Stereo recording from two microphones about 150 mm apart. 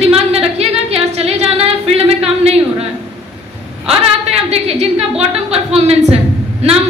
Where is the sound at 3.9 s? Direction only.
40° right (ahead or behind).